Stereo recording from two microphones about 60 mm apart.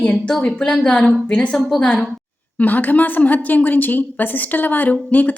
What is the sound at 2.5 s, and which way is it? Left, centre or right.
Speech, left.